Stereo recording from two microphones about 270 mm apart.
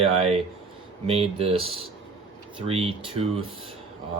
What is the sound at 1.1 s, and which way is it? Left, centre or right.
Speech, right.